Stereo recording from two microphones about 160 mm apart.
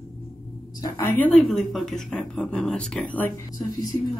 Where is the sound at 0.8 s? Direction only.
15° left (ahead or behind).